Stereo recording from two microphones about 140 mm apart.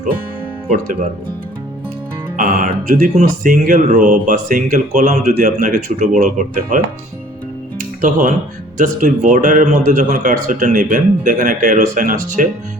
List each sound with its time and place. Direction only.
2.3 s speech: 65° right (ahead or behind)
7.8 s music: 70° right (ahead or behind)
8.8 s speech: 65° right (ahead or behind)